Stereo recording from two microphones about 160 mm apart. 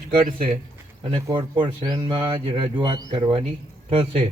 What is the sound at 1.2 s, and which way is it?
Speech, 30° right (ahead or behind).